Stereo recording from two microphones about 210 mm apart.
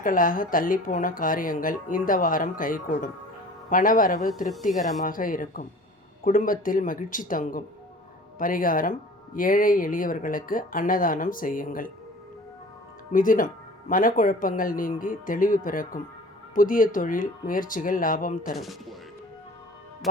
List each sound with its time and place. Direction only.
0.0 s speech: 40° left (ahead or behind)
13.1 s speech: 40° left (ahead or behind)
18.5 s speech: centre (ahead or behind)